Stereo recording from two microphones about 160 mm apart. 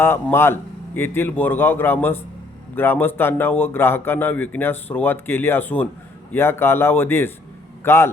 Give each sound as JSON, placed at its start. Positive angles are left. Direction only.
{"t": 0.0, "sound": "speech", "side_deg": 15}